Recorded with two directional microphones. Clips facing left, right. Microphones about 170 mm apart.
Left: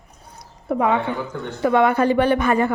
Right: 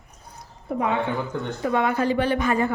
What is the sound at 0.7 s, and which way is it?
A woman's voice, 70° left (ahead or behind).